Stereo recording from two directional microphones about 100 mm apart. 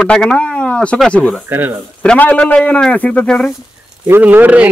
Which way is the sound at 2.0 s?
15° left (ahead or behind).